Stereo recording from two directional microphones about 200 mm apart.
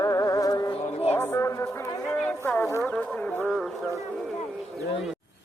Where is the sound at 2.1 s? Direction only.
5° left (ahead or behind).